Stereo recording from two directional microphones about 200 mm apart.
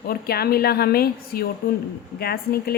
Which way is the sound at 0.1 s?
50° left (ahead or behind).